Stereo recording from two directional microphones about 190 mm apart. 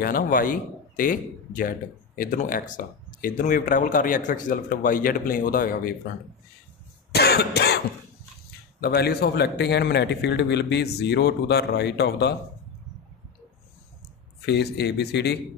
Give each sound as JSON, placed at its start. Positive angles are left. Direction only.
{"t": 0.0, "sound": "a man's voice", "side_deg": 50}
{"t": 7.1, "sound": "cough", "side_deg": 55}
{"t": 8.8, "sound": "a man's voice", "side_deg": 55}
{"t": 14.4, "sound": "a man's voice", "side_deg": 60}